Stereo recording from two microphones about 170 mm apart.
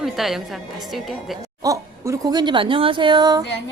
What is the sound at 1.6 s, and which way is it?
Speech, 20° right (ahead or behind).